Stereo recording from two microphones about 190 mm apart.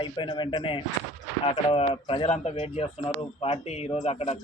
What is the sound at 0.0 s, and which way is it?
Speech, 25° left (ahead or behind).